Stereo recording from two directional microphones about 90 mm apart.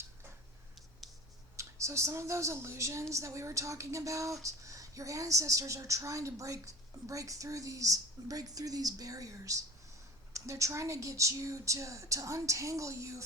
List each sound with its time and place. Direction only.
1.5 s a woman's voice: 35° right (ahead or behind)